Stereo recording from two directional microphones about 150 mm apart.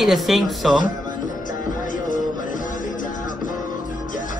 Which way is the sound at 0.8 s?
60° left (ahead or behind).